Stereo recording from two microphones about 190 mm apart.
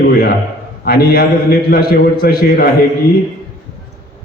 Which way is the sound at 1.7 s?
50° left (ahead or behind).